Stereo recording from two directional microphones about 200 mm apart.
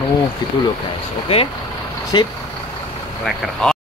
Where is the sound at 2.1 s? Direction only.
20° left (ahead or behind).